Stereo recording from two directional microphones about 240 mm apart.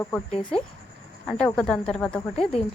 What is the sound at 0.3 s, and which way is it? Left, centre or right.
Speech, left.